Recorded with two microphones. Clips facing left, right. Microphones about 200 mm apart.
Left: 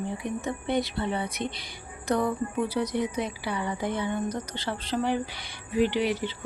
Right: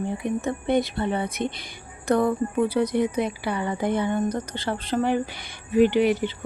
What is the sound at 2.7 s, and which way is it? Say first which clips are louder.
Speech: right 4 dB; 55° right (ahead or behind).